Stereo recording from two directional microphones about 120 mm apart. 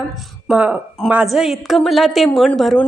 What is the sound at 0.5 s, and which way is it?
A woman's voice, 15° right (ahead or behind).